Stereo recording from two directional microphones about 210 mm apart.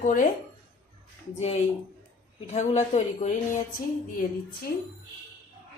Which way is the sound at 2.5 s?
35° left (ahead or behind).